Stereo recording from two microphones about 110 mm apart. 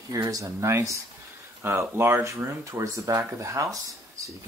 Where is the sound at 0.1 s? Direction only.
30° right (ahead or behind).